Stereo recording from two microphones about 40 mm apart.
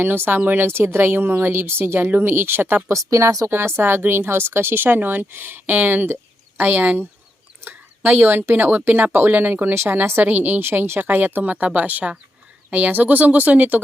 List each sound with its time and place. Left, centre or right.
0.0 s speech: right
0.3 s speech: right
0.6 s speech: right
2.0 s speech: right
3.5 s speech: right
4.9 s speech: right
9.8 s speech: right
10.2 s speech: right
11.0 s speech: right
11.4 s speech: right